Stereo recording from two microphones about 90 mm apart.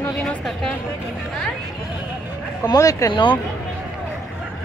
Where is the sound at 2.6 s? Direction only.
40° left (ahead or behind).